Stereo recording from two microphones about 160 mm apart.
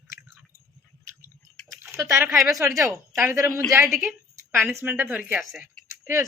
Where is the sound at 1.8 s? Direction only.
15° right (ahead or behind).